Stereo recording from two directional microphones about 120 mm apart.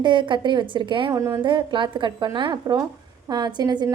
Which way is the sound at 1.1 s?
25° right (ahead or behind).